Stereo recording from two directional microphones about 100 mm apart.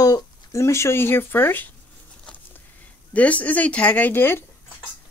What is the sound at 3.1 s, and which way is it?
Speech, 15° left (ahead or behind).